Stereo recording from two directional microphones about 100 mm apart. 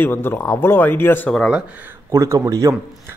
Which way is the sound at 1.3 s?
5° right (ahead or behind).